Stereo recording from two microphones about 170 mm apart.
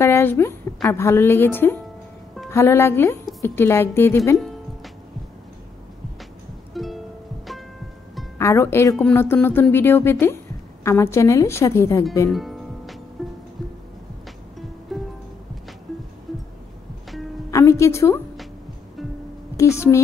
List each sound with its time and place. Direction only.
0.0 s a woman's voice: 15° left (ahead or behind)
6.7 s music: centre (ahead or behind)
8.4 s a woman's voice: 15° left (ahead or behind)
12.3 s music: centre (ahead or behind)
14.9 s music: centre (ahead or behind)
16.3 s music: centre (ahead or behind)
17.5 s music: 15° left (ahead or behind)
19.5 s speech: 15° left (ahead or behind)